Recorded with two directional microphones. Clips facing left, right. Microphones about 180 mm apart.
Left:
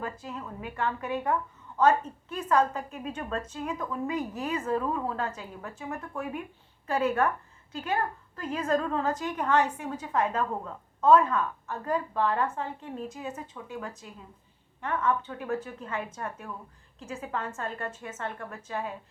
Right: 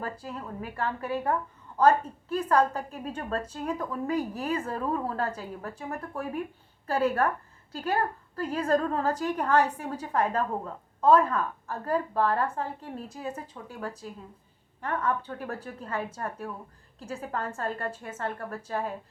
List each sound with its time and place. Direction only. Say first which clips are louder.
0.0 s a woman's voice: right 1 dB; 35° right (ahead or behind)